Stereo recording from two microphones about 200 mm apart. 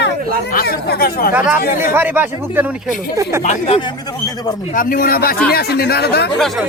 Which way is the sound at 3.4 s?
35° left (ahead or behind).